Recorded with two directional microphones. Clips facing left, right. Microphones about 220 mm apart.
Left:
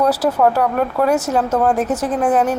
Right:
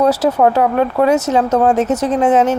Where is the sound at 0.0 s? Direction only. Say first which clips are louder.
Right 3 dB; 25° right (ahead or behind).